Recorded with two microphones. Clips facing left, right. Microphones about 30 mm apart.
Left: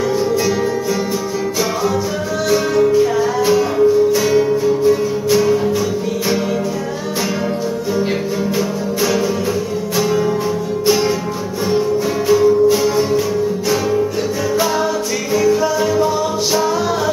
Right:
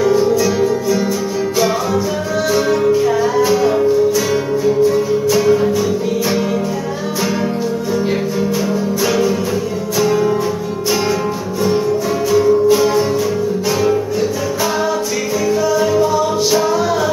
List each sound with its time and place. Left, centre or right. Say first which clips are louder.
0.0 s music: right 3 dB; centre
2.5 s music: left 1 dB; centre
9.9 s music: right 2 dB; centre
12.4 s music: right 2 dB; centre